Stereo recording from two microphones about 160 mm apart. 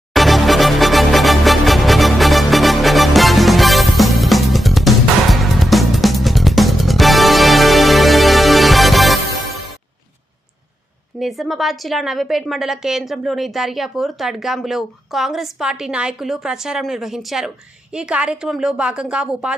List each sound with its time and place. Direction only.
0.1 s music: centre (ahead or behind)
11.2 s a woman's voice: centre (ahead or behind)